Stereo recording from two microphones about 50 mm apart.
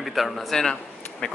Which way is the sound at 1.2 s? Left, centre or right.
Left.